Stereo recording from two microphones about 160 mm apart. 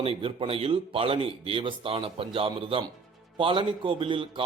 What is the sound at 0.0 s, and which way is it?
A man's voice, 35° right (ahead or behind).